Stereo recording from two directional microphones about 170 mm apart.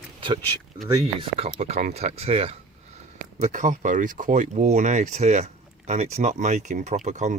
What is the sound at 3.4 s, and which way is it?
Speech, 45° right (ahead or behind).